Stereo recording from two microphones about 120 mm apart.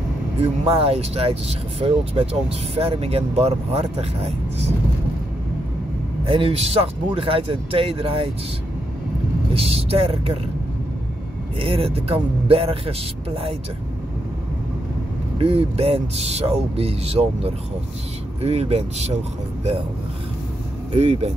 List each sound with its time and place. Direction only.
0.4 s speech: 50° right (ahead or behind)
6.2 s speech: 50° right (ahead or behind)
9.5 s speech: 55° right (ahead or behind)
11.6 s speech: 50° right (ahead or behind)
15.3 s speech: 55° right (ahead or behind)
20.9 s speech: 65° right (ahead or behind)